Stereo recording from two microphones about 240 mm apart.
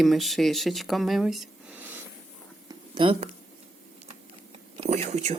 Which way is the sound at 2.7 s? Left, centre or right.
Centre.